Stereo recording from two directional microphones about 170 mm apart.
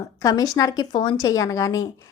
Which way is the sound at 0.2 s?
20° left (ahead or behind).